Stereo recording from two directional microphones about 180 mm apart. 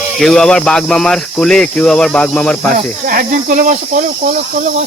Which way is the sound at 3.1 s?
50° right (ahead or behind).